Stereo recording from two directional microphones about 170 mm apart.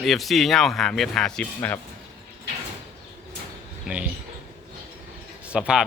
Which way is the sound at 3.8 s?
5° right (ahead or behind).